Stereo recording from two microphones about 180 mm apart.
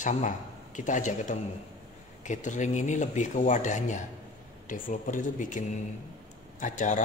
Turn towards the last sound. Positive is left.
turn(degrees=45)  # may be behind; listen again after turning